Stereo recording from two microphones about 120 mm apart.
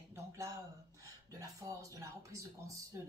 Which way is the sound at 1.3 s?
30° right (ahead or behind).